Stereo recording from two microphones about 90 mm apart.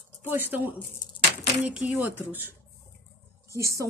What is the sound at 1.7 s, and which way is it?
Speech, 15° right (ahead or behind).